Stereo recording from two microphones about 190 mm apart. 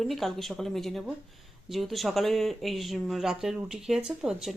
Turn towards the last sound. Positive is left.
turn(degrees=0)  # may be behind; listen again after turning